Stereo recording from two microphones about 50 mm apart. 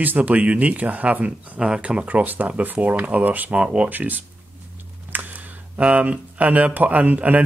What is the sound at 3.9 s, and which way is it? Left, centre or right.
Speech, right.